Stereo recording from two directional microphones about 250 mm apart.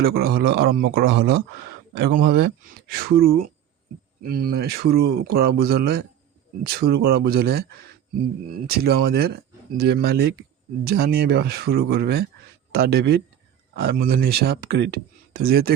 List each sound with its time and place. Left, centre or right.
0.0 s speech: right